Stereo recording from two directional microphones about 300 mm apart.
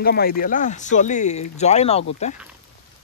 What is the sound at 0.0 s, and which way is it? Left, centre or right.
Speech, left.